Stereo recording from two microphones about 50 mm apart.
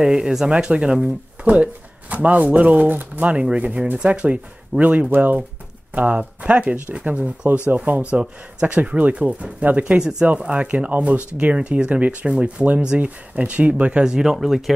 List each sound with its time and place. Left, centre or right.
0.0 s speech: centre
1.4 s speech: right
8.1 s speech: right
9.9 s speech: centre
10.2 s speech: right
14.0 s speech: centre